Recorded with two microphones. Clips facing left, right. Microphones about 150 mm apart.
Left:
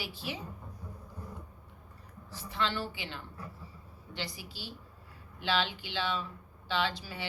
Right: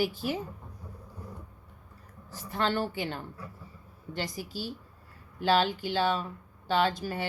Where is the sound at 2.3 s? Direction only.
45° right (ahead or behind).